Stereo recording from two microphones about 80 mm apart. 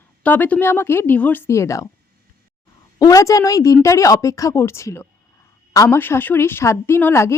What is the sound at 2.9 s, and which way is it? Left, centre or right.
A woman's voice, left.